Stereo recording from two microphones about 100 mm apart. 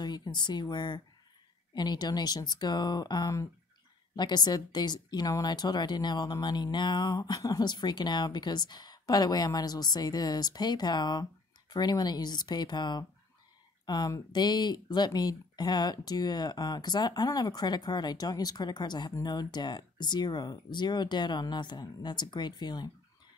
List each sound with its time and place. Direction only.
0.0 s a woman's voice: 45° left (ahead or behind)